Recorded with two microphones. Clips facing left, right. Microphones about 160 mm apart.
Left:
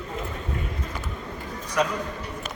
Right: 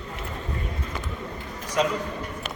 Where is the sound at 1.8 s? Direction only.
20° right (ahead or behind).